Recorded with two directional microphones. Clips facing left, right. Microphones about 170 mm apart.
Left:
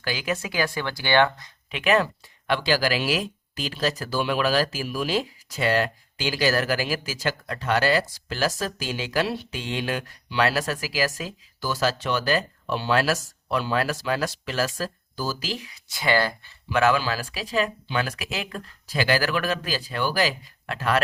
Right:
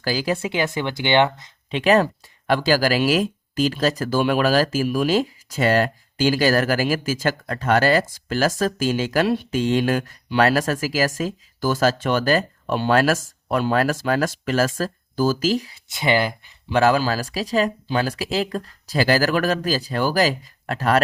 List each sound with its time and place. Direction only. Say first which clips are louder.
0.0 s speech: right 5 dB; 35° right (ahead or behind)
1.8 s speech: right 4 dB; 35° right (ahead or behind)
15.9 s speech: right 3 dB; 20° right (ahead or behind)
16.6 s speech: right 4 dB; 35° right (ahead or behind)